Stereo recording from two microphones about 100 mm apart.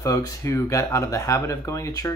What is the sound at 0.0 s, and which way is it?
Speech, 30° left (ahead or behind).